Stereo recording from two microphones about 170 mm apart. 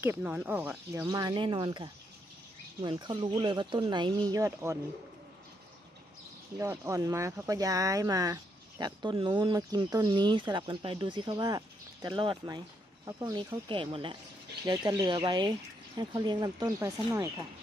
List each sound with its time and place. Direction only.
0.0 s speech: 10° right (ahead or behind)
1.0 s speech: 25° right (ahead or behind)
6.6 s speech: 20° right (ahead or behind)